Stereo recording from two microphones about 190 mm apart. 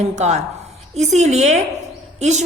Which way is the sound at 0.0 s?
35° right (ahead or behind).